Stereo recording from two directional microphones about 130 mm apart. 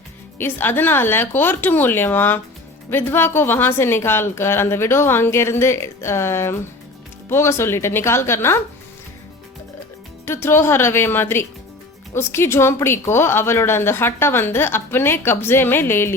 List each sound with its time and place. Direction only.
0.3 s a woman's voice: 15° left (ahead or behind)
10.2 s a woman's voice: 20° left (ahead or behind)